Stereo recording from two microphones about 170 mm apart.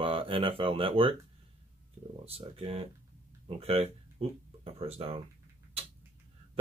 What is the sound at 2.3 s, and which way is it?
Speech, 35° right (ahead or behind).